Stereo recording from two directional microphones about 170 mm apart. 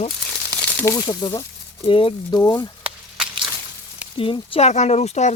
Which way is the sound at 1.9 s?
30° left (ahead or behind).